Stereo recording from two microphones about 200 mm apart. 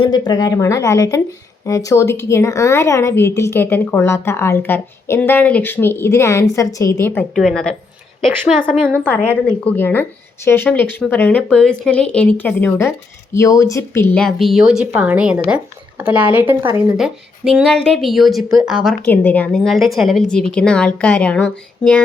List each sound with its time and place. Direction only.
0.0 s a woman's voice: 20° left (ahead or behind); by 7.8 s 5° left (ahead or behind)
8.7 s a woman's voice: 10° right (ahead or behind)
9.0 s a woman's voice: 10° left (ahead or behind)
19.0 s speech: 10° left (ahead or behind)